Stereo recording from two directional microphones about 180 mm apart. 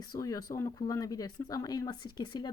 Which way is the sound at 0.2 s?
20° left (ahead or behind).